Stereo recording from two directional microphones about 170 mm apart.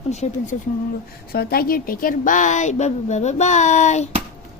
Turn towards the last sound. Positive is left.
turn(degrees=45)  # may be behind; listen again after turning